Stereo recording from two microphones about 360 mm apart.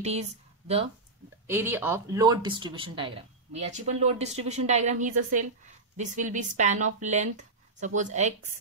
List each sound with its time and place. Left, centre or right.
0.0 s speech: centre
1.5 s speech: centre